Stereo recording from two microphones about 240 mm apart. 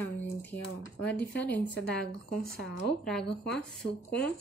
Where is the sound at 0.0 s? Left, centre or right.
Centre.